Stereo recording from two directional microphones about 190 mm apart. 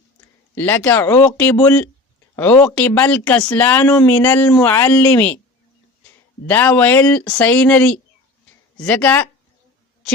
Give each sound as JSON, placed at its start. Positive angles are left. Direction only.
{"t": 0.5, "sound": "speech", "side_deg": 10}
{"t": 6.5, "sound": "speech", "side_deg": 10}